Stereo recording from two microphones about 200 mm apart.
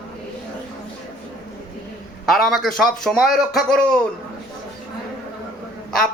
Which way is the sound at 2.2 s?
Centre (ahead or behind).